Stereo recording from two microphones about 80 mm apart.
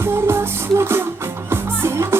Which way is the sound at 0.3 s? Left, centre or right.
Right.